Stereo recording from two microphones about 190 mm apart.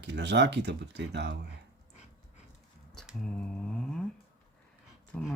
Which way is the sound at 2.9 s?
Centre (ahead or behind).